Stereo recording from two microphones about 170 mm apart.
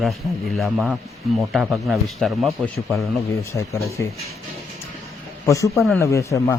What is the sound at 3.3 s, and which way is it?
Speech, 15° left (ahead or behind).